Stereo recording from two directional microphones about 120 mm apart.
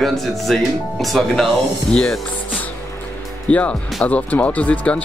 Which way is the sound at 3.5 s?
10° left (ahead or behind).